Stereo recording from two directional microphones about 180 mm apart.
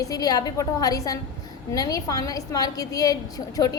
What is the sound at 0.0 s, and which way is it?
A woman's voice, 20° left (ahead or behind).